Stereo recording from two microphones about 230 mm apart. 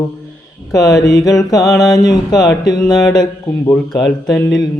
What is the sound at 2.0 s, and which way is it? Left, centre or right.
Mantra, centre.